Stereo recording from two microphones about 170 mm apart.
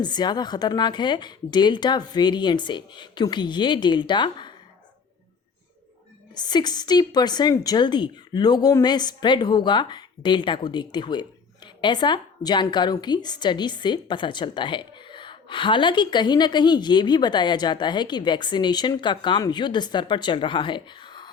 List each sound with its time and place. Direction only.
0.0 s a woman's voice: 25° left (ahead or behind)
6.3 s a woman's voice: 25° left (ahead or behind)